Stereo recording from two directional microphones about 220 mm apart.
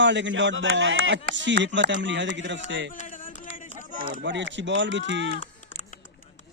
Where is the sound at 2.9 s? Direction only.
35° left (ahead or behind).